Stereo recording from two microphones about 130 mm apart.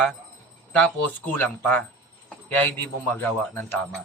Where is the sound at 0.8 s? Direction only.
15° left (ahead or behind).